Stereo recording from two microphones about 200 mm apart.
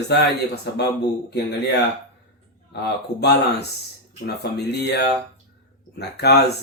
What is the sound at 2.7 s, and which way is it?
Speech, 55° left (ahead or behind).